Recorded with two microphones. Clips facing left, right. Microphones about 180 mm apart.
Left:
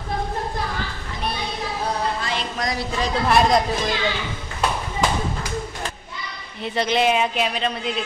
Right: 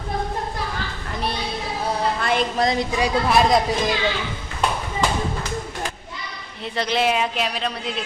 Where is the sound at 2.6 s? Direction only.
25° right (ahead or behind).